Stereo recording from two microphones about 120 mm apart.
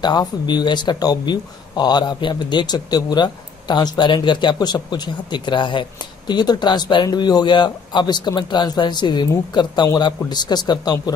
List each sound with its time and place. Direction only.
0.0 s speech: 35° left (ahead or behind)